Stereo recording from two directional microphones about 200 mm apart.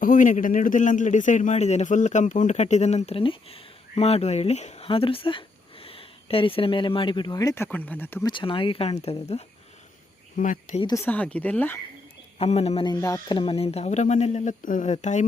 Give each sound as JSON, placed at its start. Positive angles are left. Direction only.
{"t": 0.0, "sound": "a man's voice", "side_deg": 40}
{"t": 8.3, "sound": "speech", "side_deg": 25}
{"t": 10.8, "sound": "speech", "side_deg": 20}
{"t": 11.0, "sound": "speech", "side_deg": 10}
{"t": 12.4, "sound": "a man's voice", "side_deg": 30}